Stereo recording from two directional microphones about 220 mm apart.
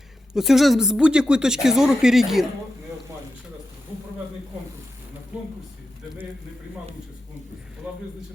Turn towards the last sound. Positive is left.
turn(degrees=-5)  # may be behind; listen again after turning